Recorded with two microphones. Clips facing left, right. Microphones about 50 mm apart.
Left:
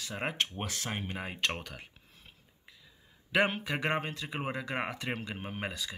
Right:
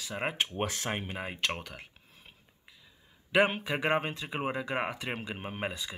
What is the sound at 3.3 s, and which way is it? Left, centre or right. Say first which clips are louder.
Speech: right 2 dB; centre.